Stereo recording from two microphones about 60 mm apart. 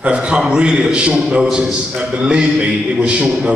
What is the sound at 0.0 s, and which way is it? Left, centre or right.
A man's voice, centre.